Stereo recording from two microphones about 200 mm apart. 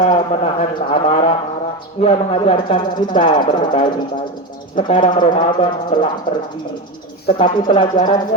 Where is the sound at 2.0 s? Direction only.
30° left (ahead or behind).